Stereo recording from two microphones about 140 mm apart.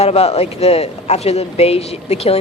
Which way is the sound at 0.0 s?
45° left (ahead or behind).